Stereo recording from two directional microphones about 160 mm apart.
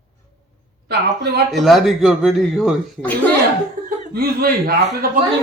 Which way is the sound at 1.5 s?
Centre (ahead or behind).